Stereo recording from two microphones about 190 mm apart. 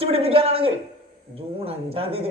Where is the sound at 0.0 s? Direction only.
30° right (ahead or behind).